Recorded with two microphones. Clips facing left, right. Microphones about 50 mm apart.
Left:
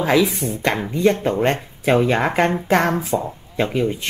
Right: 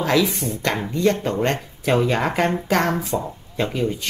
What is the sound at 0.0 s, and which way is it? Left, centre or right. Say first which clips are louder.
Speech: left 2 dB; centre.